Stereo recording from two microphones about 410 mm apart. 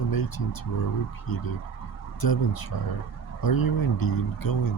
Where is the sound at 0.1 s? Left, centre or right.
Left.